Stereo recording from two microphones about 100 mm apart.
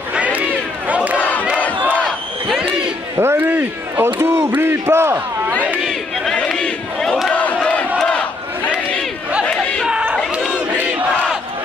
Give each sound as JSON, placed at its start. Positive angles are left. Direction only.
{"t": 0.1, "sound": "crowd", "side_deg": -15}
{"t": 3.2, "sound": "a sound", "side_deg": -20}
{"t": 5.8, "sound": "chatter", "side_deg": 0}
{"t": 6.3, "sound": "battle cry", "side_deg": 10}
{"t": 9.5, "sound": "chatter", "side_deg": 10}
{"t": 9.8, "sound": "a sound", "side_deg": -10}
{"t": 10.8, "sound": "battle cry", "side_deg": -15}